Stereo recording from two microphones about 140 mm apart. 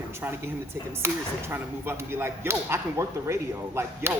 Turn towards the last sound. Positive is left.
turn(degrees=-20)  # may be behind; listen again after turning